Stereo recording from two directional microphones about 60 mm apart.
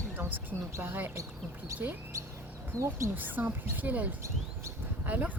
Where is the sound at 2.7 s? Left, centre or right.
Right.